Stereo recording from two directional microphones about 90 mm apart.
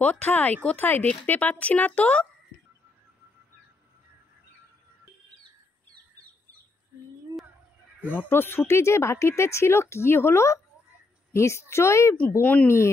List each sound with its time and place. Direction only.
0.0 s speech: 15° left (ahead or behind)
8.1 s a child's voice: 20° left (ahead or behind)
12.3 s speech: 20° left (ahead or behind)
12.6 s a child's voice: 30° left (ahead or behind)